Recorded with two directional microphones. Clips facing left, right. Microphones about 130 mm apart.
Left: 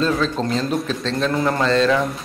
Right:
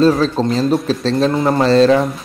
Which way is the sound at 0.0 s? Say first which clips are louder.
Right 7 dB; 35° right (ahead or behind).